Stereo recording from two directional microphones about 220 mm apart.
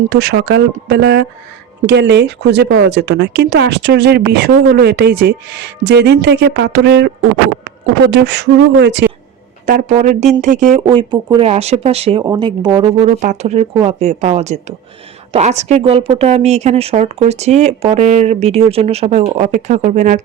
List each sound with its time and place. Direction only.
0.1 s speech: 45° right (ahead or behind)
9.6 s a woman's voice: 35° right (ahead or behind)
10.8 s speech: 20° right (ahead or behind)
12.2 s a woman's voice: 15° right (ahead or behind)